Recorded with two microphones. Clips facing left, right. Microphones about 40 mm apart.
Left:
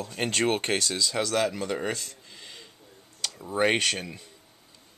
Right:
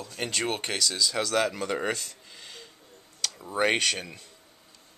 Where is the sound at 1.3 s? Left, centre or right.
Centre.